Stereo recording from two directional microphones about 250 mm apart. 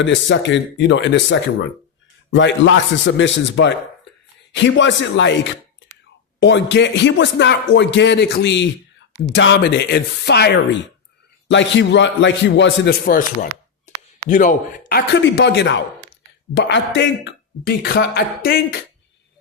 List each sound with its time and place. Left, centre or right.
0.0 s speech: left
6.4 s speech: left